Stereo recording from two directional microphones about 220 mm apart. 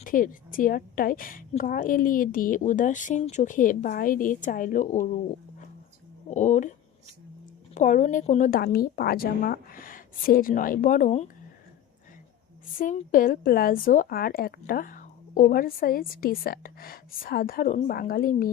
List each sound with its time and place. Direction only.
0.0 s a woman's voice: 40° left (ahead or behind)
6.3 s a woman's voice: 35° left (ahead or behind)
7.7 s a woman's voice: 35° left (ahead or behind)
12.7 s a woman's voice: 35° left (ahead or behind)